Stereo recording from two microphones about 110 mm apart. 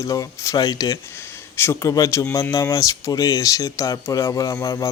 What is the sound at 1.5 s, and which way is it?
Speech, 25° left (ahead or behind).